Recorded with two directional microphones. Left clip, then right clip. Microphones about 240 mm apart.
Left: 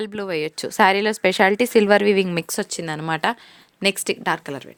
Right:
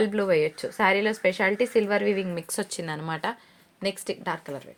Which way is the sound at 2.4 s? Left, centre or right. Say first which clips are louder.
Left 5 dB; left.